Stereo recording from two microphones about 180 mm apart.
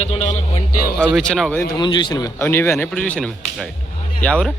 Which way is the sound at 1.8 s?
25° left (ahead or behind).